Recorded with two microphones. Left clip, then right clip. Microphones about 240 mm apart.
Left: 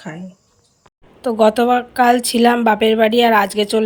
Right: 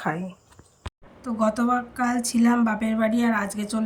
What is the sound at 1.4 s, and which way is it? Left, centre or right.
Speech, left.